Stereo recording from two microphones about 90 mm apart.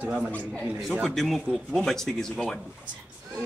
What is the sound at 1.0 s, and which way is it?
Speech, centre (ahead or behind).